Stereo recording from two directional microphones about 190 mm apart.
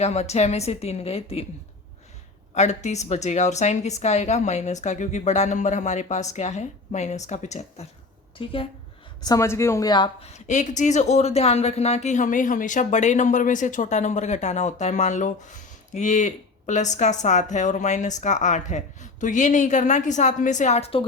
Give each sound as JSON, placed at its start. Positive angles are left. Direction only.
{"t": 0.0, "sound": "a woman's voice", "side_deg": 35}
{"t": 2.6, "sound": "a woman's voice", "side_deg": 35}
{"t": 9.2, "sound": "a woman's voice", "side_deg": 15}